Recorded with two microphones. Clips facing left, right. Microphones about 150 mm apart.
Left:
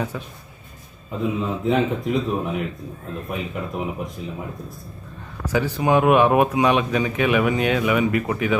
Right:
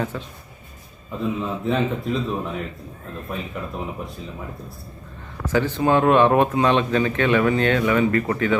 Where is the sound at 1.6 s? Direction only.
15° left (ahead or behind).